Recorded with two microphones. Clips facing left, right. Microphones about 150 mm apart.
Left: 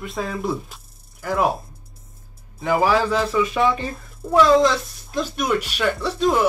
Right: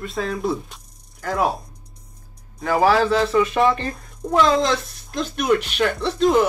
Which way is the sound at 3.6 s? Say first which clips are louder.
Right 1 dB; centre (ahead or behind).